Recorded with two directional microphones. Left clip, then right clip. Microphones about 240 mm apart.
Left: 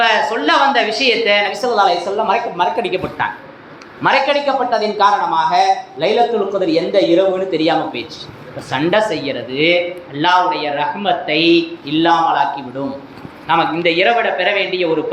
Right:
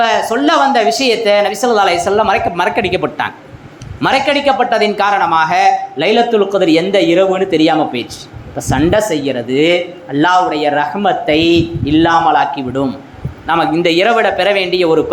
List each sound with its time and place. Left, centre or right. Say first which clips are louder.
0.0 s a woman's voice: right 2 dB; right